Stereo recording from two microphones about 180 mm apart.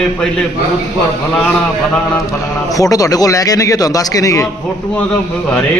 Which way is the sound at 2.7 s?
20° left (ahead or behind).